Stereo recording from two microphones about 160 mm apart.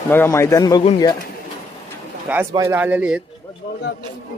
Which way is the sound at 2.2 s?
10° right (ahead or behind).